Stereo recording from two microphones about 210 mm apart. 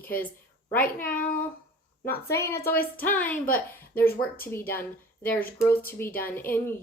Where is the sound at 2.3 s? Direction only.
10° left (ahead or behind).